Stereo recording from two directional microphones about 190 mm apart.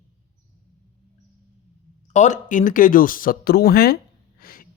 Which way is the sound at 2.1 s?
40° left (ahead or behind).